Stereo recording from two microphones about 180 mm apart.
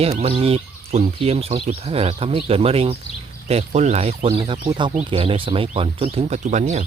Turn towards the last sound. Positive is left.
turn(degrees=-40)  # may be behind; listen again after turning